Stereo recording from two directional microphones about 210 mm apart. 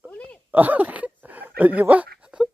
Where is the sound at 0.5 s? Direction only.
10° right (ahead or behind).